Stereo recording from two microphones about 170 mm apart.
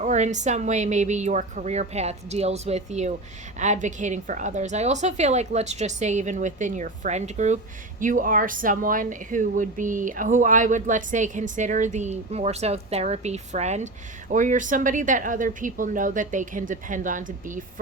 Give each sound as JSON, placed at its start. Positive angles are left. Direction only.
{"t": 0.0, "sound": "a woman's voice", "side_deg": -45}